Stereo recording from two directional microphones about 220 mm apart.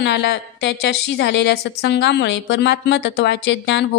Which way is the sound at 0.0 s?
50° left (ahead or behind).